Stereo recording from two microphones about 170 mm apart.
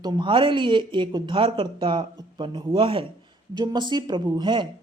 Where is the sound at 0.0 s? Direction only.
25° right (ahead or behind).